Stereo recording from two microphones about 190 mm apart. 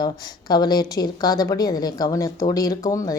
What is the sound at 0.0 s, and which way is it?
A woman's voice, 20° left (ahead or behind).